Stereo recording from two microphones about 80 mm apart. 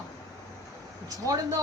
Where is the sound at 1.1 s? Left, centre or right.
Right.